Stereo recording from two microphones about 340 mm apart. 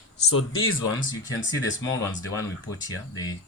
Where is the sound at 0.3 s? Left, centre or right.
Left.